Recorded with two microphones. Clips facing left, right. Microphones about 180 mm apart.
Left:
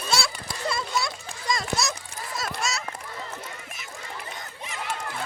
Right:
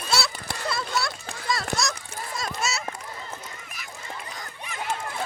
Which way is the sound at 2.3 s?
Centre (ahead or behind).